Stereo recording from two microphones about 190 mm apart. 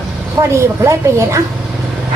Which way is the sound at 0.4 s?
15° right (ahead or behind).